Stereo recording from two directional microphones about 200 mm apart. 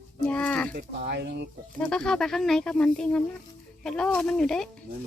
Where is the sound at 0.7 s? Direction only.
50° right (ahead or behind).